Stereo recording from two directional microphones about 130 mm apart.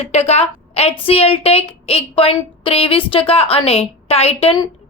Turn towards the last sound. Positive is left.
turn(degrees=50)  # may be behind; listen again after turning